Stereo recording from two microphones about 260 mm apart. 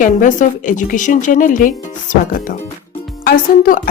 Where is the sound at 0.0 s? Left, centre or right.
Left.